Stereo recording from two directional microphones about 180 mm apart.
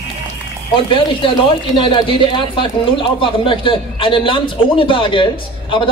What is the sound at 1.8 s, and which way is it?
Speech, 30° left (ahead or behind).